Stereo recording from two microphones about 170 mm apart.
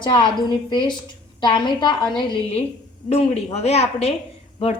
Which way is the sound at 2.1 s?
35° left (ahead or behind).